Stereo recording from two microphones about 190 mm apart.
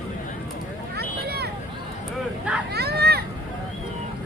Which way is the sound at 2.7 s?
60° right (ahead or behind).